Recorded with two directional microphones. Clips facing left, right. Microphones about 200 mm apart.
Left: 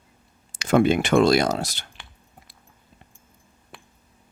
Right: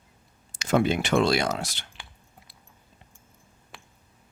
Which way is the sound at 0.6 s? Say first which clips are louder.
Left 5 dB; 55° left (ahead or behind).